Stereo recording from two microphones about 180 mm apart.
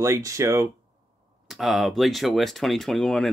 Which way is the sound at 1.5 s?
Centre (ahead or behind).